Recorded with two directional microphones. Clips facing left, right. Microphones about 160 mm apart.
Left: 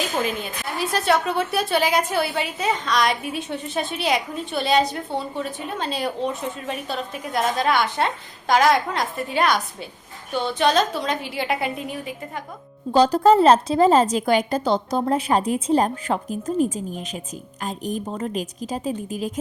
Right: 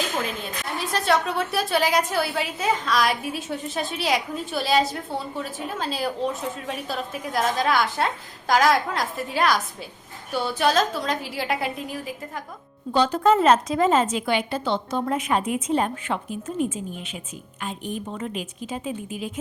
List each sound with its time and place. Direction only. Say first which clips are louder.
0.2 s a woman's voice: left 3 dB; centre (ahead or behind)
12.9 s a woman's voice: left 4 dB; 35° left (ahead or behind)